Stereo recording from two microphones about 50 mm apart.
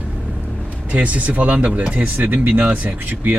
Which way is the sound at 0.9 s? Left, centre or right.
Right.